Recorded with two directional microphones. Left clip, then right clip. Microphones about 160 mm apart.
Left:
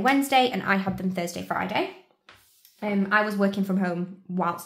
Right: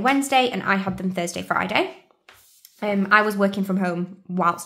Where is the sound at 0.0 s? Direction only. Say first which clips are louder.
Right 2 dB; 15° right (ahead or behind).